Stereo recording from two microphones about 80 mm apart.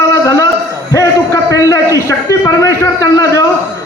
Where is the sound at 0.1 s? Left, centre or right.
Left.